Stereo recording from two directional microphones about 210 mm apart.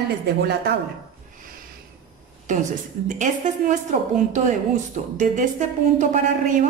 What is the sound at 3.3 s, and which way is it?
Speech, 35° right (ahead or behind).